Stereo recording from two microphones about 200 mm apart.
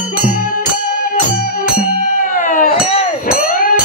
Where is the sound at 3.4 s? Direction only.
45° left (ahead or behind).